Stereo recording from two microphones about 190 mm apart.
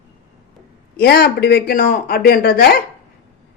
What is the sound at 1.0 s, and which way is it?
Speech, 55° left (ahead or behind).